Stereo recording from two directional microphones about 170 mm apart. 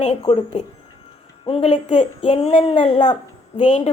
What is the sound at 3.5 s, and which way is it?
Speech, 45° left (ahead or behind).